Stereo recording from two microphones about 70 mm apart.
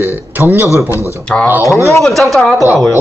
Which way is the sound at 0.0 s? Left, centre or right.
Right.